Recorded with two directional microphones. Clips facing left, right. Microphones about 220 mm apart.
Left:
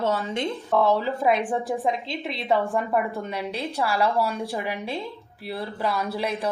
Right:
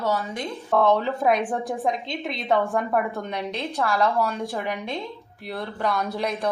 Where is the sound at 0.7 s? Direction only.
Centre (ahead or behind).